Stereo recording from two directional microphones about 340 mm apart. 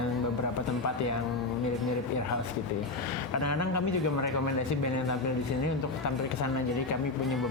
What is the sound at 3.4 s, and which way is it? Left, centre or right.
Speech, left.